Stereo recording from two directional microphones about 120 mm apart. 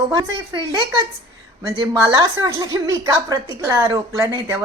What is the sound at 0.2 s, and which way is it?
Speech, 30° right (ahead or behind).